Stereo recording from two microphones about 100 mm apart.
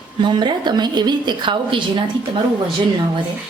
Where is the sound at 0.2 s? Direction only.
50° right (ahead or behind).